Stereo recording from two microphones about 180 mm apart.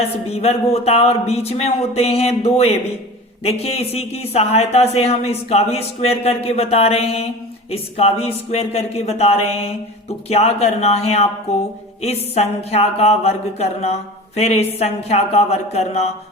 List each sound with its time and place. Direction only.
0.3 s speech: 35° left (ahead or behind)